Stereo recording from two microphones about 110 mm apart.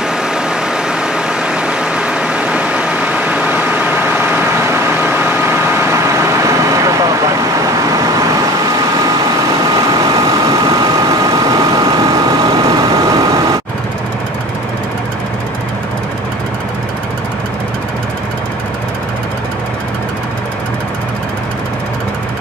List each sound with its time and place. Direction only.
1.1 s vehicle: 5° right (ahead or behind); by 7.2 s 30° right (ahead or behind)
10.4 s vehicle: 30° right (ahead or behind)